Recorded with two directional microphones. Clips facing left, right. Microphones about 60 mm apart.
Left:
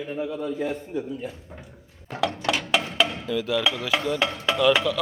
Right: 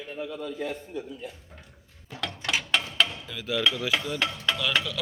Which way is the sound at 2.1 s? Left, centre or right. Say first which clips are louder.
Left 10 dB; left.